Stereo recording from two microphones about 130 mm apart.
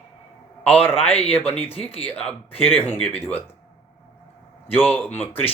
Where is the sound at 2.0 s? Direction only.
10° left (ahead or behind).